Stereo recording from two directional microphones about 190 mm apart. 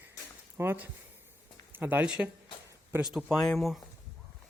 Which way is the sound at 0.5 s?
10° right (ahead or behind).